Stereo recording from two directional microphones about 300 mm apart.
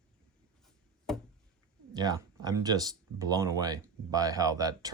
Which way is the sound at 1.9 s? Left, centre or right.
Centre.